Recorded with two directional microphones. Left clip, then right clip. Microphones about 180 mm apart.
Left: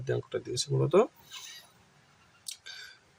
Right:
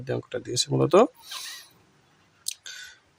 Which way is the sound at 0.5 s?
50° right (ahead or behind).